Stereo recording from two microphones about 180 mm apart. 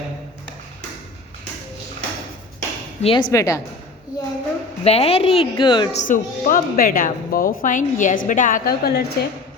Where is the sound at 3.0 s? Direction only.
30° left (ahead or behind).